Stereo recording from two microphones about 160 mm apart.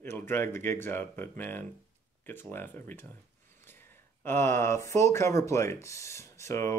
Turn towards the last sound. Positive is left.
turn(degrees=20)  # may be behind; listen again after turning